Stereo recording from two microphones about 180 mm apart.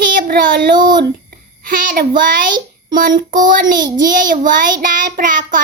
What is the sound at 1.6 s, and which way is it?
A child's voice, 55° right (ahead or behind).